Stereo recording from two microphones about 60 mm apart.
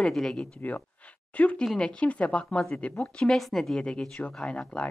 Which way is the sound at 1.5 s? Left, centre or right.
Centre.